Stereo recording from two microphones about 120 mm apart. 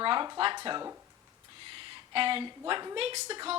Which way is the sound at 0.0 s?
40° right (ahead or behind).